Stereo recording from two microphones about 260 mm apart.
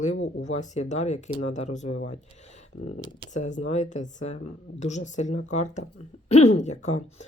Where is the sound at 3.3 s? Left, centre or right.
Left.